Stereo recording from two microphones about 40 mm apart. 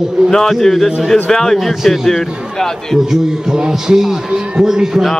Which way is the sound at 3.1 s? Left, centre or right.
Centre.